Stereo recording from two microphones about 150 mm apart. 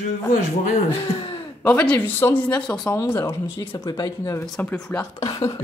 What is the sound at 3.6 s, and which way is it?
Speech, 30° left (ahead or behind).